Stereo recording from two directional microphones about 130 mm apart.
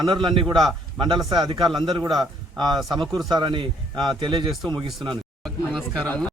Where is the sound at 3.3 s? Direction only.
40° right (ahead or behind).